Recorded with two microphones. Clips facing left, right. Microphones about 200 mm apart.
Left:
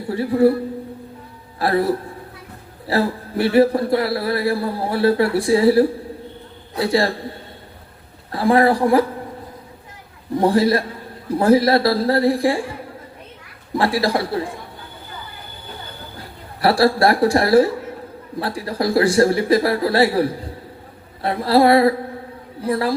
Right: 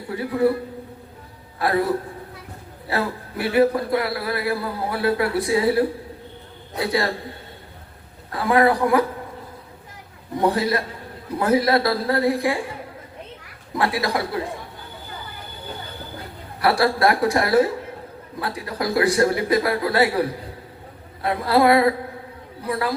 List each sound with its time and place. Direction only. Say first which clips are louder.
0.1 s a man's voice: left 5 dB; 30° left (ahead or behind)
1.5 s a man's voice: left 2 dB; 30° left (ahead or behind)
8.3 s a man's voice: left 3 dB; 30° left (ahead or behind)
10.4 s a man's voice: left 5 dB; 30° left (ahead or behind)
13.7 s a man's voice: left 4 dB; 30° left (ahead or behind)
16.6 s a man's voice: left 4 dB; 30° left (ahead or behind)